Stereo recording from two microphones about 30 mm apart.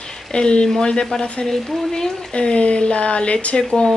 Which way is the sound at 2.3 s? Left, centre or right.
Left.